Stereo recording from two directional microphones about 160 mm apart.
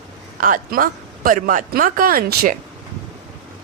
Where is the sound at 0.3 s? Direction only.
60° right (ahead or behind).